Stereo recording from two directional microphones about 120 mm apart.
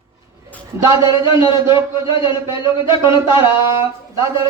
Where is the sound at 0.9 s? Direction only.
40° left (ahead or behind).